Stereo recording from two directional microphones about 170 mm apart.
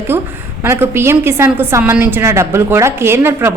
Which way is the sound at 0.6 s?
15° right (ahead or behind).